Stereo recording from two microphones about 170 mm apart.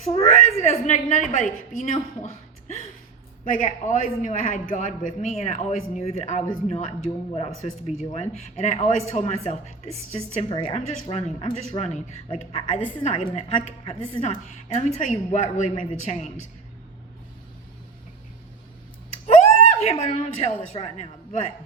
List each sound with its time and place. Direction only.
0.1 s a man's voice: 45° left (ahead or behind)
19.3 s a sound: 40° left (ahead or behind)
20.7 s a man's voice: 40° left (ahead or behind)